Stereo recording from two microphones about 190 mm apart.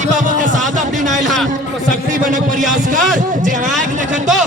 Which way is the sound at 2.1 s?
45° right (ahead or behind).